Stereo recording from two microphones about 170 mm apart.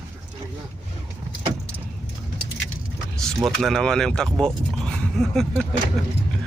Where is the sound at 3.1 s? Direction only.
Centre (ahead or behind).